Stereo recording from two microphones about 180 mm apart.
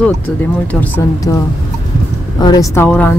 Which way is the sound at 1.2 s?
15° left (ahead or behind).